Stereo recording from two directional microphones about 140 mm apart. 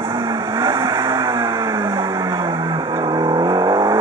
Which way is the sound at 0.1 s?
30° right (ahead or behind).